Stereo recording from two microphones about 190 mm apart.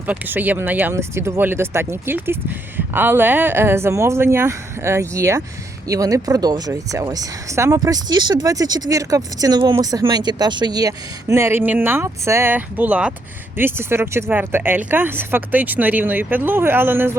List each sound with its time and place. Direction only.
0.1 s speech: 10° right (ahead or behind)